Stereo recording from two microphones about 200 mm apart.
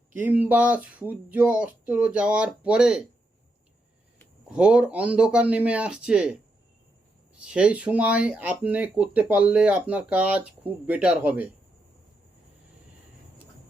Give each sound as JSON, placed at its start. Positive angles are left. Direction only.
{"t": 0.1, "sound": "speech", "side_deg": -10}
{"t": 4.4, "sound": "speech", "side_deg": -5}
{"t": 7.4, "sound": "speech", "side_deg": -5}